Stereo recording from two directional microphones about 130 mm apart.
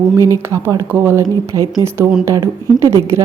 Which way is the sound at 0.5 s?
25° right (ahead or behind).